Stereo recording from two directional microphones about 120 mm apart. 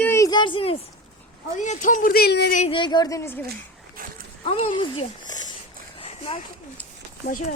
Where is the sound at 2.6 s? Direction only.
45° left (ahead or behind); by 3.4 s 20° left (ahead or behind).